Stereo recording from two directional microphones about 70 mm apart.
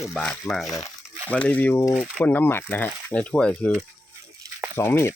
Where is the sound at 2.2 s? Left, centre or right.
Left.